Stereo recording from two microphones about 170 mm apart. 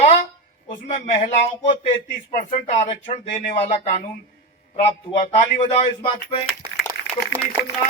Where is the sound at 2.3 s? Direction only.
45° left (ahead or behind).